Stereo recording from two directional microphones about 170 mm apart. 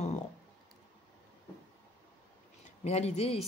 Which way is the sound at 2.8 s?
40° left (ahead or behind).